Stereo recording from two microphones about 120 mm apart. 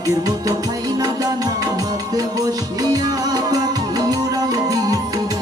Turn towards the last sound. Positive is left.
turn(degrees=-30)  # may be behind; listen again after turning